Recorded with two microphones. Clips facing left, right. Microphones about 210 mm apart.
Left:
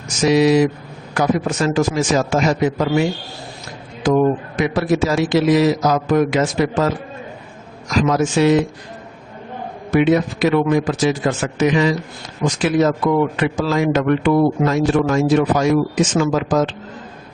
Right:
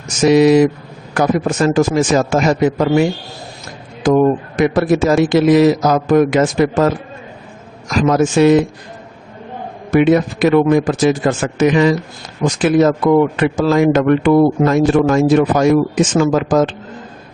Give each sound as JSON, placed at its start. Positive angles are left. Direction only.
{"t": 0.2, "sound": "a man's voice", "side_deg": -50}
{"t": 4.0, "sound": "a man's voice", "side_deg": -50}
{"t": 9.9, "sound": "a man's voice", "side_deg": -50}